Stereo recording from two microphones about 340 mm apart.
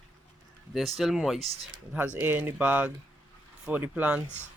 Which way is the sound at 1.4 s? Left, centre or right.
Centre.